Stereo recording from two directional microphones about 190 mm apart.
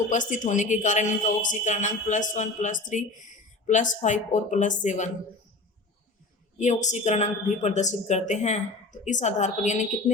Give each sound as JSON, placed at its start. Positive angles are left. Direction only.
{"t": 0.1, "sound": "a woman's voice", "side_deg": 40}
{"t": 6.6, "sound": "a woman's voice", "side_deg": 40}